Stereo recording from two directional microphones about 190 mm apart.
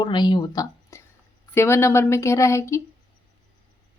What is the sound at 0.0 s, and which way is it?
Speech, 25° left (ahead or behind).